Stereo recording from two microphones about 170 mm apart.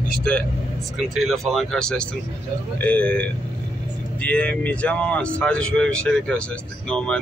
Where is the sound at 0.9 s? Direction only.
Centre (ahead or behind).